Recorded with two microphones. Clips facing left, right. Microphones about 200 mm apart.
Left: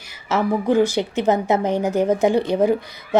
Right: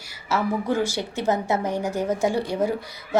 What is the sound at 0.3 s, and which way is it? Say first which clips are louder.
Speech: left 5 dB; 20° left (ahead or behind).